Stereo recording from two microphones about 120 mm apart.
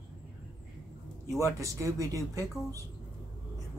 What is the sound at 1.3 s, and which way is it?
Speech, 25° right (ahead or behind).